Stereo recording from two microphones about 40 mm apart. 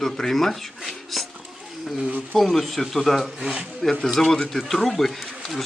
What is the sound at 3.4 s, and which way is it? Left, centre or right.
Speech, right.